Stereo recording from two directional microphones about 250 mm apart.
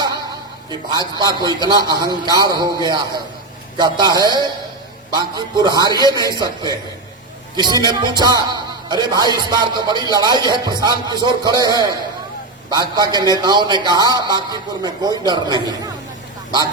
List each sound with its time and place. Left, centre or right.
0.9 s a man's voice: centre
12.7 s a man's voice: centre